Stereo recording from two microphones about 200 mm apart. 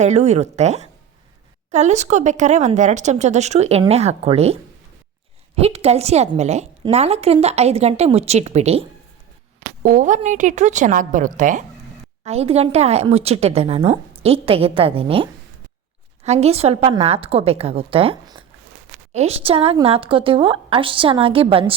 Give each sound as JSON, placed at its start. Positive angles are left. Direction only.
{"t": 0.0, "sound": "speech", "side_deg": -35}
{"t": 5.5, "sound": "speech", "side_deg": -30}
{"t": 9.8, "sound": "a woman's voice", "side_deg": -40}